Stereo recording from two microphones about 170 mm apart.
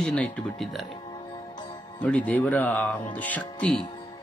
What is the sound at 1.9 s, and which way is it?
Speech, 10° left (ahead or behind).